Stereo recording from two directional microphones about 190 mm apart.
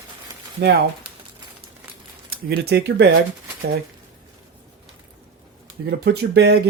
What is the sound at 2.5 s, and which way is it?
Speech, 60° right (ahead or behind).